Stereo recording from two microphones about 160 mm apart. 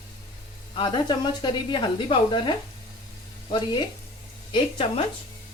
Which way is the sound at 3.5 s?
30° left (ahead or behind).